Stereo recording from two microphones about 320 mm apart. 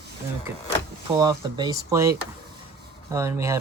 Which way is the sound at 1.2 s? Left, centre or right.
Centre.